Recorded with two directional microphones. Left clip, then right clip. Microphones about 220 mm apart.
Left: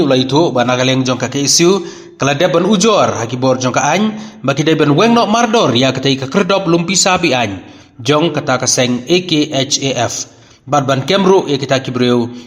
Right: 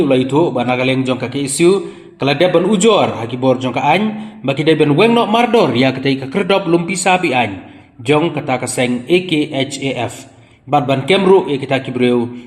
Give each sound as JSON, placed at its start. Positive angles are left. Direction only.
{"t": 0.3, "sound": "a man's voice", "side_deg": 30}